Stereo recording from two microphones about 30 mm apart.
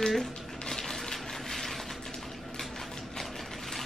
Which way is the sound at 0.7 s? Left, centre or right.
Centre.